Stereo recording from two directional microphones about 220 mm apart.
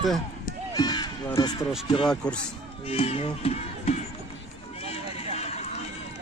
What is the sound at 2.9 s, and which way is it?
Speech, 25° left (ahead or behind).